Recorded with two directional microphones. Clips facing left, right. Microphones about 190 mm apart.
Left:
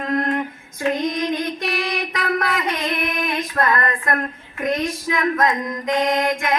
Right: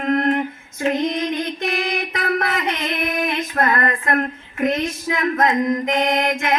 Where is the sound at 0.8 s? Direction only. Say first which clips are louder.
Right 1 dB; 25° right (ahead or behind).